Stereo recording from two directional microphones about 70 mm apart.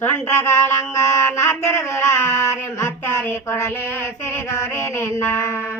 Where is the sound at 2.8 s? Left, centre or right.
Left.